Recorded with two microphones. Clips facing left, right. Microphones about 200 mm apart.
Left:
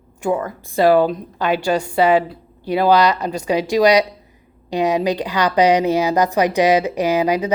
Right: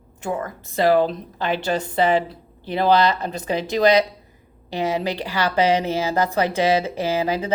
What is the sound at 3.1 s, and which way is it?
Speech, 15° left (ahead or behind).